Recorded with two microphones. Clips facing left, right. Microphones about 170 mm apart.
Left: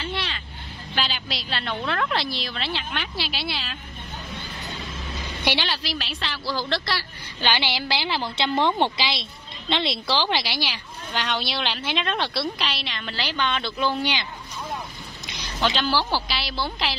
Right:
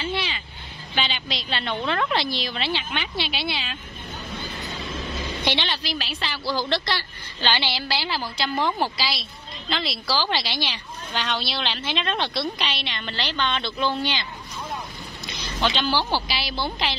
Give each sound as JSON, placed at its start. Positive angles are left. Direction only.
{"t": 0.0, "sound": "vehicle", "side_deg": 0}
{"t": 0.9, "sound": "a woman's voice", "side_deg": 0}
{"t": 5.4, "sound": "a woman's voice", "side_deg": 10}
{"t": 7.4, "sound": "a woman's voice", "side_deg": 15}
{"t": 15.6, "sound": "a woman's voice", "side_deg": 0}